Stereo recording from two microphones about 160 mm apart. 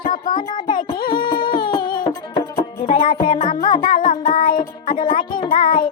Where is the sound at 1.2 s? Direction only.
30° left (ahead or behind).